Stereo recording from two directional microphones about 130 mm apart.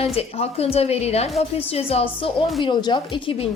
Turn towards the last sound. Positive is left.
turn(degrees=40)  # may be behind; listen again after turning